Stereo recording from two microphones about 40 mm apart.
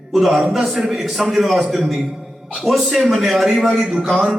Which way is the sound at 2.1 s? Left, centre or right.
Centre.